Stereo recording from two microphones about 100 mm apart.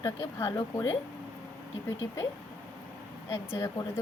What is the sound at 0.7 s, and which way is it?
Speech, 30° left (ahead or behind).